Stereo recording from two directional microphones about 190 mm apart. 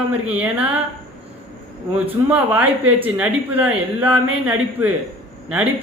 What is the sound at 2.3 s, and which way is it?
A woman's voice, 10° right (ahead or behind).